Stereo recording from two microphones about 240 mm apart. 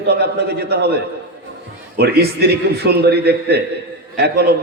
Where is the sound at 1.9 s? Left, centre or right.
Right.